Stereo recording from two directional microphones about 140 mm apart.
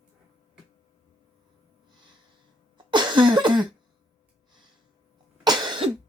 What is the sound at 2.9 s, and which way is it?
Cough, 35° right (ahead or behind).